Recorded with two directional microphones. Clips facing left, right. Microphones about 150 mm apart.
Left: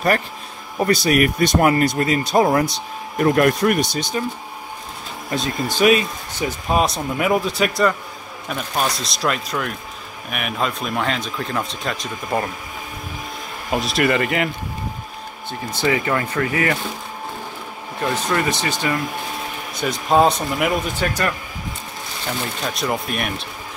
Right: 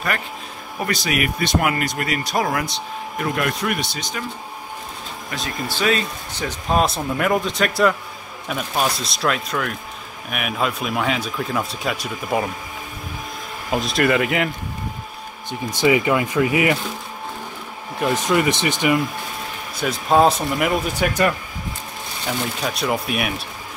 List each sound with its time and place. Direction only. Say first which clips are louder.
0.8 s speech: left 6 dB; 40° left (ahead or behind)
3.2 s speech: left 8 dB; 45° left (ahead or behind)
5.3 s speech: left 5 dB; 20° left (ahead or behind)
6.8 s speech: even; 5° left (ahead or behind)
13.7 s speech: even; centre (ahead or behind)
15.7 s speech: right 3 dB; 15° right (ahead or behind)
18.1 s speech: right 3 dB; 20° right (ahead or behind)
19.8 s speech: even; centre (ahead or behind)
22.2 s speech: right 1 dB; centre (ahead or behind)